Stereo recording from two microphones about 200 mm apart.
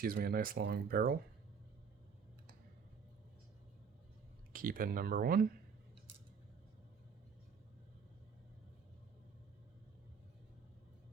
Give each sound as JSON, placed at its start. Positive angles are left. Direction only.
{"t": 0.0, "sound": "speech", "side_deg": -45}
{"t": 4.5, "sound": "speech", "side_deg": -45}